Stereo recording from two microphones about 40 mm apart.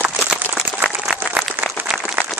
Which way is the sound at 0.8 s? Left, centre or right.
Right.